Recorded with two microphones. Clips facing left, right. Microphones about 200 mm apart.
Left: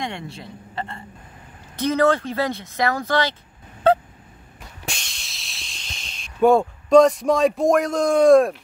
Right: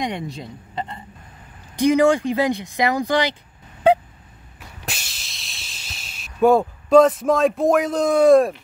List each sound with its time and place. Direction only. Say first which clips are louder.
0.0 s speech: right 4 dB; 15° right (ahead or behind)
4.8 s hiss: even; 5° right (ahead or behind)